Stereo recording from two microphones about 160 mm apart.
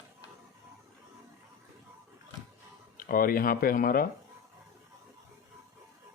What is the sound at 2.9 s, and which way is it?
Speech, 65° left (ahead or behind).